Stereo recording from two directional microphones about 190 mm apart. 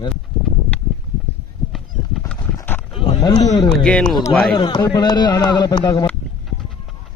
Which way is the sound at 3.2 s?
20° left (ahead or behind).